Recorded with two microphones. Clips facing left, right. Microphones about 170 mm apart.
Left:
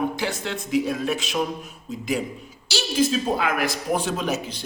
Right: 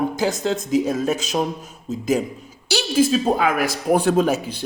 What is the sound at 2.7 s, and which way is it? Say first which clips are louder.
Speech: right 4 dB; 55° right (ahead or behind).